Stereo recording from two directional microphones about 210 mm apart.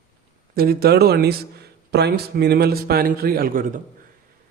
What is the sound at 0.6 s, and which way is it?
A man's voice, 45° right (ahead or behind).